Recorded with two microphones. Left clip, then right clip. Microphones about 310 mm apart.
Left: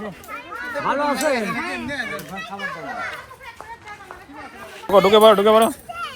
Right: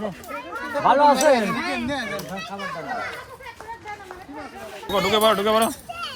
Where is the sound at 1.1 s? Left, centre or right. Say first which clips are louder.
Right 4 dB; right.